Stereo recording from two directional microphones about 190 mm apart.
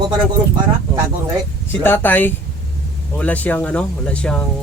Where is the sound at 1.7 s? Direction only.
10° left (ahead or behind).